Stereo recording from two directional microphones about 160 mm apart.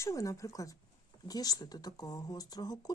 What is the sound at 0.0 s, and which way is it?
Speech, 20° left (ahead or behind).